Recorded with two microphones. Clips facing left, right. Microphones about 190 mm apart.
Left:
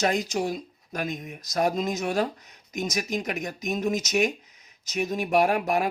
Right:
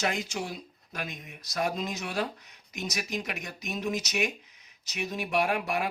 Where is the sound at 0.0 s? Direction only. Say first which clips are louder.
Left 6 dB; 40° left (ahead or behind).